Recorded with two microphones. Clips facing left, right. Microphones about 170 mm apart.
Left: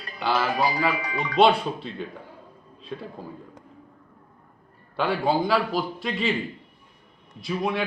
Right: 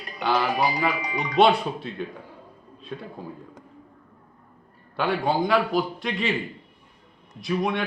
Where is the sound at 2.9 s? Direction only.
Centre (ahead or behind).